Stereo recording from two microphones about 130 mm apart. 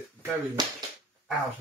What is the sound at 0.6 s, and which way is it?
Speech, 35° right (ahead or behind).